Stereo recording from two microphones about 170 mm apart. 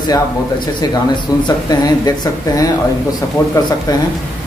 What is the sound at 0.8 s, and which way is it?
Speech, 25° left (ahead or behind).